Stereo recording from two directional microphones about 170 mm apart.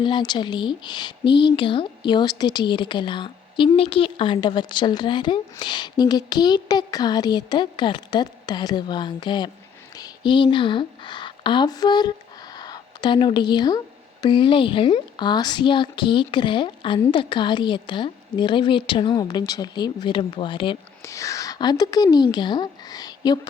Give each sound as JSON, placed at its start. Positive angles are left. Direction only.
{"t": 0.0, "sound": "speech", "side_deg": 25}
{"t": 21.0, "sound": "speech", "side_deg": 20}